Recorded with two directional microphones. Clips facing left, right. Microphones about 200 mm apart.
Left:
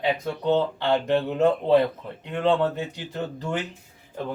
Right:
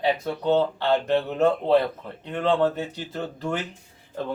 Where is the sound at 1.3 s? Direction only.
15° left (ahead or behind).